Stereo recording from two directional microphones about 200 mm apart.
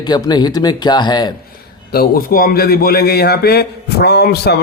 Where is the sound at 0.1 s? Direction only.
20° left (ahead or behind).